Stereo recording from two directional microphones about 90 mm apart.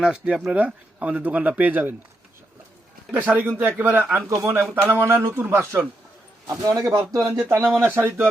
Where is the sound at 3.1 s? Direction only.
20° right (ahead or behind).